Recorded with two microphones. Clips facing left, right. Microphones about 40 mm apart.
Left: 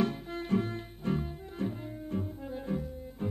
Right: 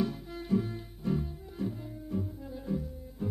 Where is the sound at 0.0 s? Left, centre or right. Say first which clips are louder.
Left 2 dB; left.